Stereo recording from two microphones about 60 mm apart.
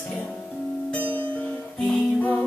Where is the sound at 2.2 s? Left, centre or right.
Left.